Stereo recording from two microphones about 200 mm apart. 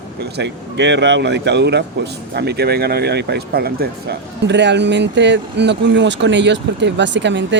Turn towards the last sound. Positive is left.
turn(degrees=-65)  # may be behind; listen again after turning